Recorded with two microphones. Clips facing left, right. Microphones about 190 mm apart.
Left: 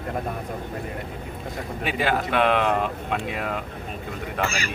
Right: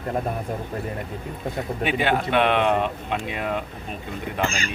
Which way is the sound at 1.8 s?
Centre (ahead or behind).